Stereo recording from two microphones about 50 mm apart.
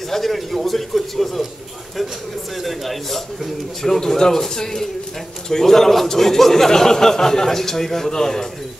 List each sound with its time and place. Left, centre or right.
0.1 s a man's voice: centre
2.5 s a man's voice: centre